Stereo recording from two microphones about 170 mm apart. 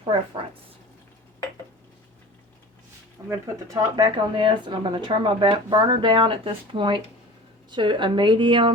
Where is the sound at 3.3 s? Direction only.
20° right (ahead or behind).